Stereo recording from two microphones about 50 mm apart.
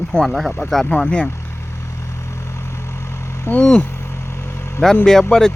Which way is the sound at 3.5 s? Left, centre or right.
Left.